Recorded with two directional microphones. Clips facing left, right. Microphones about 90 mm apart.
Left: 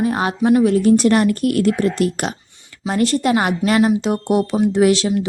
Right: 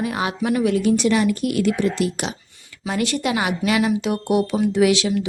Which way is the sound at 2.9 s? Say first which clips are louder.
Left 5 dB; 40° left (ahead or behind).